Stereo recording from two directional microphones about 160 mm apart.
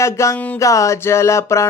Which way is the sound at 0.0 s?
20° left (ahead or behind).